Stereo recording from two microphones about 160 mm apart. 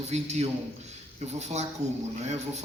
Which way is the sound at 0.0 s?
45° right (ahead or behind).